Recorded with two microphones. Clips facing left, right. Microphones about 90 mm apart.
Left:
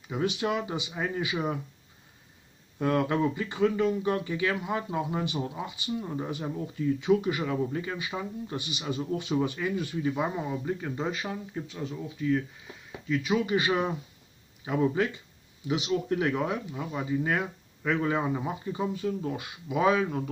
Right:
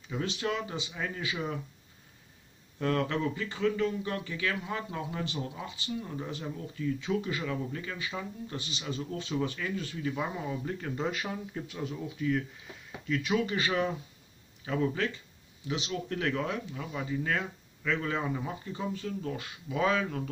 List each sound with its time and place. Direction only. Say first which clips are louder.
0.1 s speech: left 4 dB; 15° left (ahead or behind)
2.8 s speech: left 4 dB; 15° left (ahead or behind)
11.6 s speech: left 1 dB; 5° right (ahead or behind); by 20.2 s 15° left (ahead or behind)